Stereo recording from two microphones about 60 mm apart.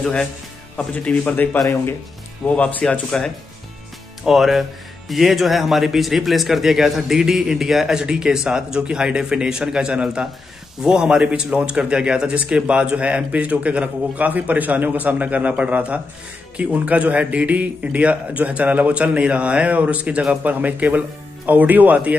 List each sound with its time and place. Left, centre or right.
0.9 s a man's voice: left
2.8 s speech: centre
4.2 s speech: centre; by 22.1 s right